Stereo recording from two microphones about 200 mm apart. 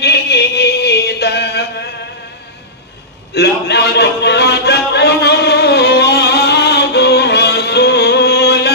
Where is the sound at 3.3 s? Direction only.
55° left (ahead or behind).